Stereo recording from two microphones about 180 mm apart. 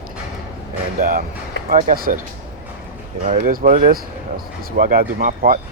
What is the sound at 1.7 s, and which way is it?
Speech, 50° right (ahead or behind).